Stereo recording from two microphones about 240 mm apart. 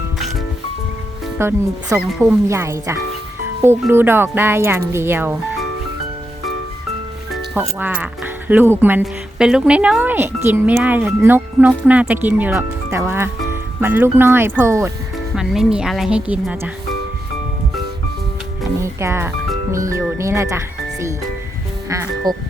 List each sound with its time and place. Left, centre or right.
0.2 s music: centre
1.4 s speech: centre
2.0 s a woman's voice: centre
2.5 s speech: centre
7.5 s a woman's voice: centre
18.8 s speech: centre
22.3 s speech: centre